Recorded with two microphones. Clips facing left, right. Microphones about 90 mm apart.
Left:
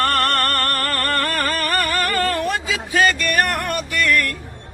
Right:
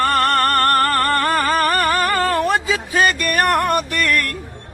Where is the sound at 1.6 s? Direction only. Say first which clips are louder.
Right 4 dB; 35° right (ahead or behind).